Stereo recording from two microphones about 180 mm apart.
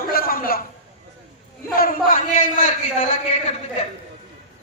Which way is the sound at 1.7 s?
50° left (ahead or behind).